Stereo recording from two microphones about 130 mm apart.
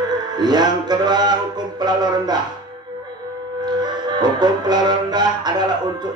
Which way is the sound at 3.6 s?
30° right (ahead or behind).